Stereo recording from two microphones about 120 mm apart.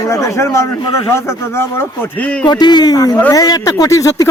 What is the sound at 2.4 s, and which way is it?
Speech, 35° left (ahead or behind).